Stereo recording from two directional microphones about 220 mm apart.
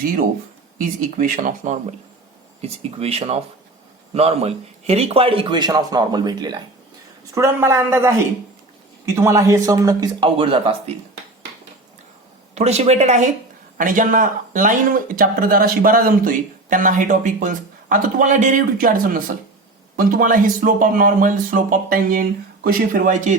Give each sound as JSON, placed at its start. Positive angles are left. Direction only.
{"t": 0.0, "sound": "a man's voice", "side_deg": -40}
{"t": 9.1, "sound": "speech", "side_deg": -15}
{"t": 12.5, "sound": "speech", "side_deg": -30}